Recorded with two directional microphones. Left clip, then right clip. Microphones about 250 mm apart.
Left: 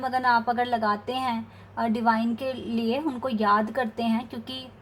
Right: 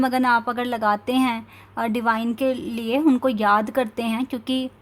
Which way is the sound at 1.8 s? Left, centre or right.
Right.